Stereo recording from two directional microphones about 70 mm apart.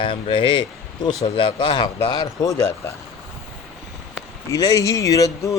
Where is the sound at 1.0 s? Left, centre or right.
Left.